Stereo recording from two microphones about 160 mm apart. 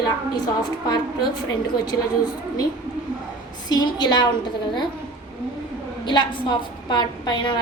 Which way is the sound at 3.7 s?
25° left (ahead or behind).